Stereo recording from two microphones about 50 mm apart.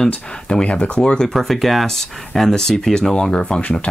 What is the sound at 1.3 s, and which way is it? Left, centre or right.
Speech, centre.